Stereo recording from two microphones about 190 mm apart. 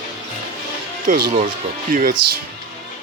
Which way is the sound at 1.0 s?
45° right (ahead or behind).